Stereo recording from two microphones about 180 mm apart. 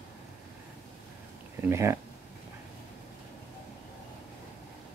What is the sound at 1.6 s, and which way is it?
Speech, 15° right (ahead or behind).